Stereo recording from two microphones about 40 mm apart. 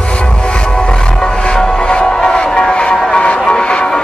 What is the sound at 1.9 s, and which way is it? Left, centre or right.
Music, left.